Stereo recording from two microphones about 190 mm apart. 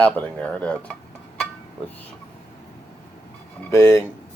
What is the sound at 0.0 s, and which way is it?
Speech, 5° left (ahead or behind).